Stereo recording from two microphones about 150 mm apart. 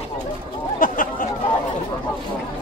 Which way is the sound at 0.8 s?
65° left (ahead or behind).